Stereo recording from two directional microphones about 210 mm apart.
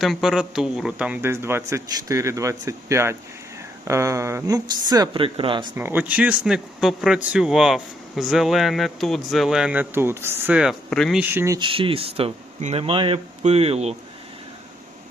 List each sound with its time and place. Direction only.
0.0 s a man's voice: centre (ahead or behind); by 5.7 s 25° right (ahead or behind)
5.7 s speech: 10° right (ahead or behind)
11.2 s speech: 10° right (ahead or behind); by 13.9 s 30° right (ahead or behind)